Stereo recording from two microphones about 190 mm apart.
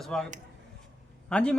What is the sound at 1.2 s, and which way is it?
Speech, 5° left (ahead or behind).